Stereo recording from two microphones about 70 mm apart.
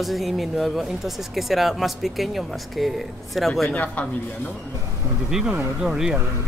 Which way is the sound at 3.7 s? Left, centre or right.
Centre.